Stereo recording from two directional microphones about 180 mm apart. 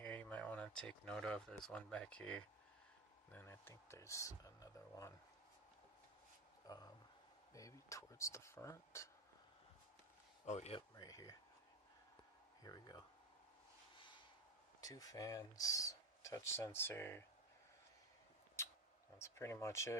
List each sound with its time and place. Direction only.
0.0 s a sound: 10° left (ahead or behind)
1.6 s speech: 5° left (ahead or behind)
6.7 s speech: 20° left (ahead or behind)
10.4 s speech: 35° left (ahead or behind)
11.0 s speech: 20° left (ahead or behind)
12.6 s speech: 20° left (ahead or behind)
13.9 s a sound: 25° left (ahead or behind)
14.8 s speech: 20° left (ahead or behind)
18.6 s a sound: 15° left (ahead or behind)
19.1 s speech: 15° left (ahead or behind)